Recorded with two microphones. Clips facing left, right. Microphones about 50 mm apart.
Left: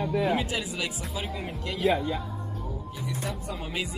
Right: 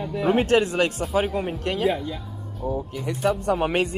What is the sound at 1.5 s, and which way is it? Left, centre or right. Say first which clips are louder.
Speech: right 3 dB; right.